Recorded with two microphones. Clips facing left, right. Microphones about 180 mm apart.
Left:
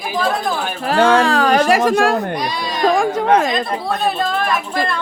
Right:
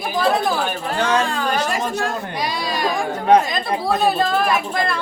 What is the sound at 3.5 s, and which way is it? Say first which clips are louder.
Speech: even; centre (ahead or behind).